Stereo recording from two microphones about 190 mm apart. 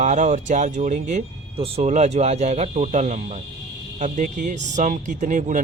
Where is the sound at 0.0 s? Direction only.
40° right (ahead or behind).